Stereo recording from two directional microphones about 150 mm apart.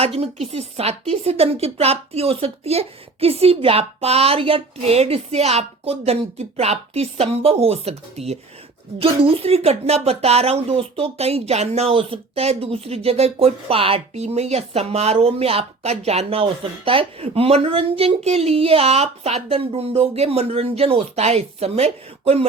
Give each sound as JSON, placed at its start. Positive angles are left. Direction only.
{"t": 0.0, "sound": "speech", "side_deg": -40}